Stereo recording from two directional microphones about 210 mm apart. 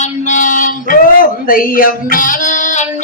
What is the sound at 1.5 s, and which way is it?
Female singing, 40° left (ahead or behind).